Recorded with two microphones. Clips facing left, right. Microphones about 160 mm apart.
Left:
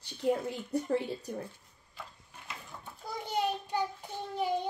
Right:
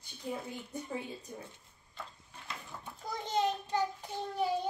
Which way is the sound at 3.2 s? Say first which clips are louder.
Even; 10° left (ahead or behind).